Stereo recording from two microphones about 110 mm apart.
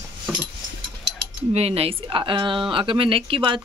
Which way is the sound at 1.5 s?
70° right (ahead or behind).